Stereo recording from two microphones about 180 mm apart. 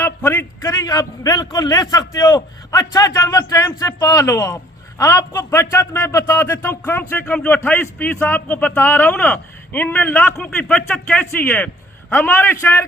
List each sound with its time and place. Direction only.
0.0 s a man's voice: 10° left (ahead or behind)